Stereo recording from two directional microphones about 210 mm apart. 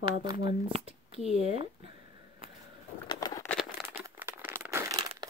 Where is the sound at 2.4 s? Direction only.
25° right (ahead or behind).